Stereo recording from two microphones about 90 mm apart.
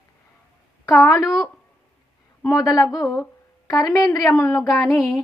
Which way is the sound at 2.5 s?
45° left (ahead or behind).